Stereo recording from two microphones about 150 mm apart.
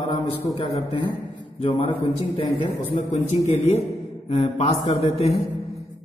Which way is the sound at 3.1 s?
50° left (ahead or behind).